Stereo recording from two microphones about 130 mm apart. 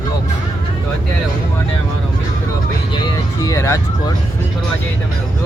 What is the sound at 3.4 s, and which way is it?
Speech, 25° left (ahead or behind).